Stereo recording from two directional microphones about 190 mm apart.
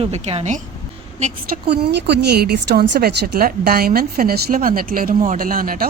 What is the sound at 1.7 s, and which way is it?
A woman's voice, 60° right (ahead or behind).